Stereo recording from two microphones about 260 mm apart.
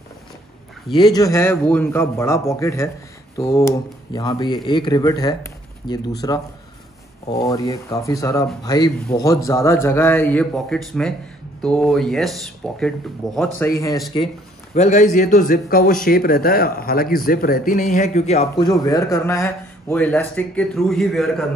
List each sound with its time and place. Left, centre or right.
0.9 s a man's voice: centre
14.7 s speech: left; by 21.5 s centre